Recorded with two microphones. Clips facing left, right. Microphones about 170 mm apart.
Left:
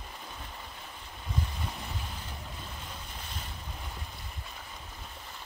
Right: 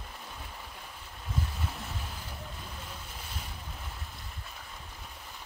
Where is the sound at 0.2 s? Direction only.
5° right (ahead or behind).